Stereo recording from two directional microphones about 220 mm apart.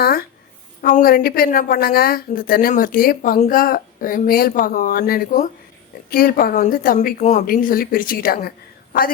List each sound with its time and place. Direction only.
0.0 s a woman's voice: 45° left (ahead or behind)